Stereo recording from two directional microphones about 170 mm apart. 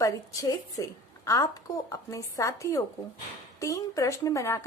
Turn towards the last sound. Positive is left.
turn(degrees=15)  # may be behind; listen again after turning